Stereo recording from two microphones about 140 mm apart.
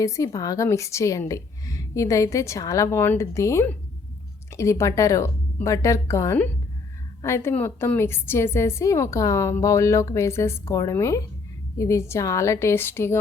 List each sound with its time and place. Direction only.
0.0 s a woman's voice: 25° left (ahead or behind)